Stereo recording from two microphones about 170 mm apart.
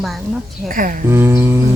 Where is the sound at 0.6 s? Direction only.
55° right (ahead or behind).